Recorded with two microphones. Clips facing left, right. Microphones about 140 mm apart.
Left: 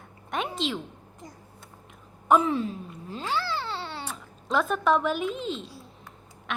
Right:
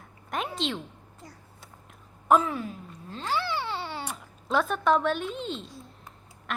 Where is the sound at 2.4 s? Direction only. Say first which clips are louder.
Left 5 dB; 25° left (ahead or behind).